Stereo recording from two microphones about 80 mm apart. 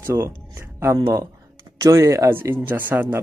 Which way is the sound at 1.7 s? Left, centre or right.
Right.